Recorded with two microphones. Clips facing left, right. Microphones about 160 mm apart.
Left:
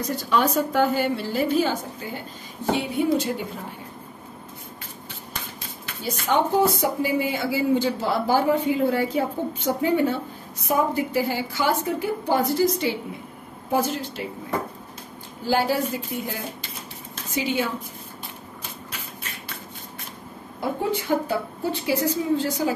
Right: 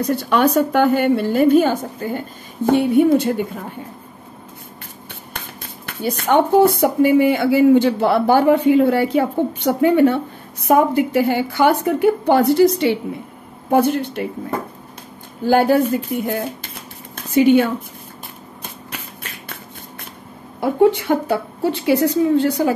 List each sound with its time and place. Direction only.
0.0 s speech: 65° right (ahead or behind)
5.9 s speech: 60° right (ahead or behind)
13.7 s speech: 60° right (ahead or behind)
15.4 s speech: 55° right (ahead or behind)
17.1 s a sound: 60° right (ahead or behind)
21.1 s speech: 70° right (ahead or behind)